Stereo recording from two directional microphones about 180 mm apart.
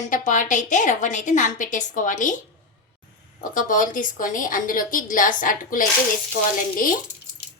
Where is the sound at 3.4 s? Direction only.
45° left (ahead or behind).